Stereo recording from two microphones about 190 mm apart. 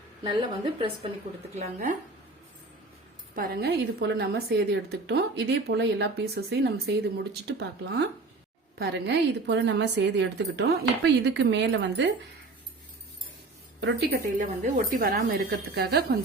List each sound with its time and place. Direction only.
1.5 s speech: 35° right (ahead or behind)
3.3 s a woman's voice: 50° right (ahead or behind)
13.8 s a woman's voice: 60° right (ahead or behind)
14.6 s a woman's voice: 45° right (ahead or behind)